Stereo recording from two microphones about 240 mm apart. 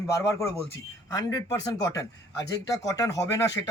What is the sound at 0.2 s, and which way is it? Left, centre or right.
Speech, centre.